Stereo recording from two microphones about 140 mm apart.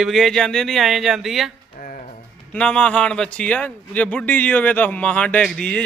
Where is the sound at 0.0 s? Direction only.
Centre (ahead or behind).